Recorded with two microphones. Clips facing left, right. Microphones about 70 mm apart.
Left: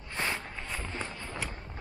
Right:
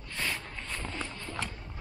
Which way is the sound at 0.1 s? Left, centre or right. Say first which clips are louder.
Left 2 dB; left.